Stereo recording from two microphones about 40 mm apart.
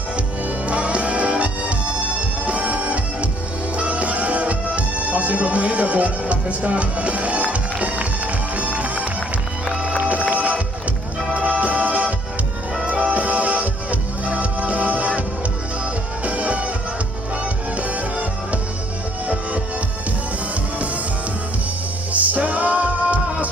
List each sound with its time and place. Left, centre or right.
0.7 s music: right
16.2 s music: right
17.7 s music: right
22.1 s music: right